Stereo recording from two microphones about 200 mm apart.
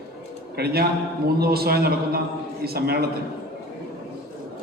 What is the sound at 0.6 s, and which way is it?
A man's voice, 50° right (ahead or behind).